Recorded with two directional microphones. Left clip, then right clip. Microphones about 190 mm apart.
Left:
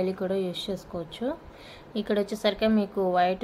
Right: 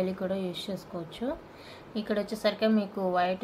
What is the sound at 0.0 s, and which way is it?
A woman's voice, 30° left (ahead or behind).